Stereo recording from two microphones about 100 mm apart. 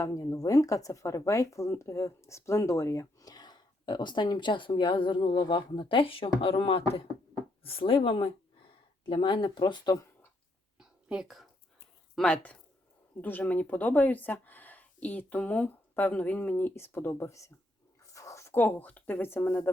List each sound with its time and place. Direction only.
0.0 s speech: 35° left (ahead or behind); by 9.9 s 55° left (ahead or behind)
10.8 s a sound: 5° right (ahead or behind)
12.1 s speech: 10° left (ahead or behind)